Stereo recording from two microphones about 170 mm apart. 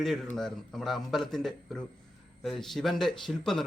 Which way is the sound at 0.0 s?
Centre (ahead or behind).